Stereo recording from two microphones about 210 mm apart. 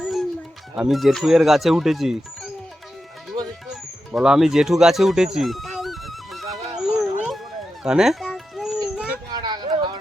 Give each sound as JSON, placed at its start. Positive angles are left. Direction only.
{"t": 0.0, "sound": "a sound", "side_deg": 0}
{"t": 0.8, "sound": "speech", "side_deg": 0}
{"t": 3.3, "sound": "music", "side_deg": -20}
{"t": 3.7, "sound": "bird", "side_deg": -5}
{"t": 7.9, "sound": "dog", "side_deg": 0}
{"t": 9.3, "sound": "a sound", "side_deg": -20}